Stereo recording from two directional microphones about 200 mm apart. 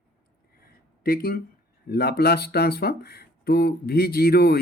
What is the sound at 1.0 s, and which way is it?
Speech, 50° left (ahead or behind).